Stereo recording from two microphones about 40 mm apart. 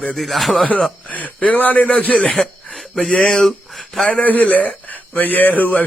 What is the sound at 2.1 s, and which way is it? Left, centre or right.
Speech, left.